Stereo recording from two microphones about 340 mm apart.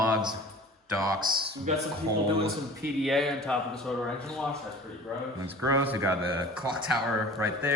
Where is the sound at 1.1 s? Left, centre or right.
Right.